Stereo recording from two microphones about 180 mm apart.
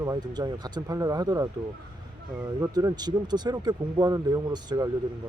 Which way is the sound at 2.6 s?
20° right (ahead or behind).